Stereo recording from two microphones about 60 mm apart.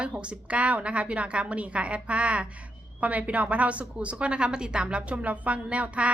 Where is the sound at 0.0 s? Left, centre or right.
Centre.